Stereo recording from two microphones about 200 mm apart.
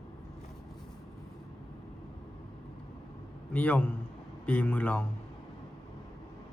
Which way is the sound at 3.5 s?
5° left (ahead or behind).